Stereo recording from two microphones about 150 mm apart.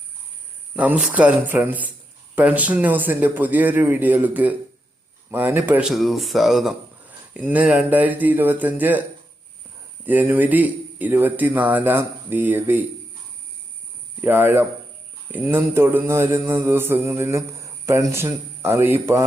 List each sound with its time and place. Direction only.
0.8 s speech: 10° right (ahead or behind)
5.9 s speech: centre (ahead or behind)
14.2 s speech: 15° right (ahead or behind)